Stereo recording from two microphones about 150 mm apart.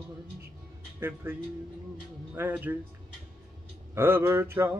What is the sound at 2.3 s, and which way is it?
Speech, 10° right (ahead or behind).